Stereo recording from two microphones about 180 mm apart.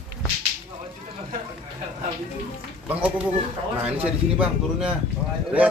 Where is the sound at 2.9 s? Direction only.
10° right (ahead or behind).